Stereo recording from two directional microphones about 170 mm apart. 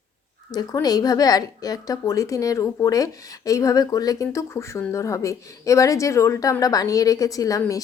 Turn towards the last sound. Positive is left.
turn(degrees=20)  # may be behind; listen again after turning